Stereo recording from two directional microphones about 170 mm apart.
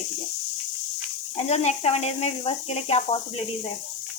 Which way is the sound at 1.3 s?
40° left (ahead or behind).